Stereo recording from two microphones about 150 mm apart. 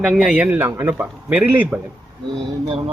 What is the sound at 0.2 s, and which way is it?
A man's voice, 10° right (ahead or behind).